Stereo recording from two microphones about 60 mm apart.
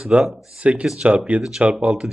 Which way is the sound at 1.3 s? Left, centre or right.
Right.